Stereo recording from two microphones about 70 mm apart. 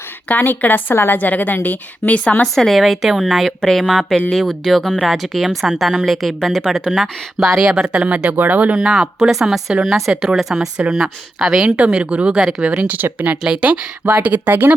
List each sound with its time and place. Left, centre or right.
0.3 s a woman's voice: left
2.6 s speech: centre
7.9 s speech: centre
8.8 s speech: centre; by 14.7 s right